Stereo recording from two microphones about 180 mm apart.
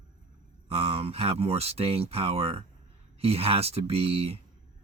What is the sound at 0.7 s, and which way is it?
Speech, 35° right (ahead or behind).